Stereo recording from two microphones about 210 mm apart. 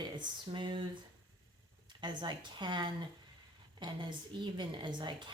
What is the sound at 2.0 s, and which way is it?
Speech, 20° right (ahead or behind).